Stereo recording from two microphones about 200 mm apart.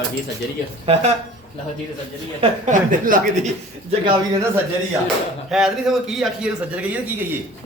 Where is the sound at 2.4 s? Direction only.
40° right (ahead or behind).